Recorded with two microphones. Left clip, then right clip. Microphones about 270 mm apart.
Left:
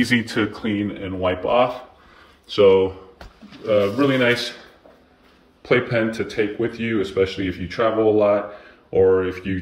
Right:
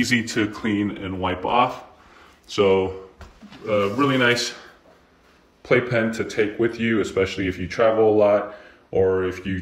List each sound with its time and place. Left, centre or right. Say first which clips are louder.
0.0 s speech: left 1 dB; centre
5.6 s speech: left 1 dB; centre